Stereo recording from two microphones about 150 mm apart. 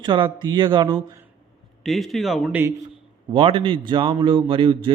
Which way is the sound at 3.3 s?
35° right (ahead or behind).